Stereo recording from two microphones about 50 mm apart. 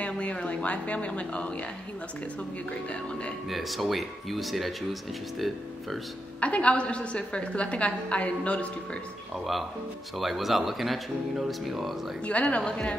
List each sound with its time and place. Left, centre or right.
0.0 s a woman's voice: left
2.9 s a woman's voice: left
3.4 s speech: centre
6.4 s a woman's voice: left
9.3 s speech: centre
12.3 s a woman's voice: left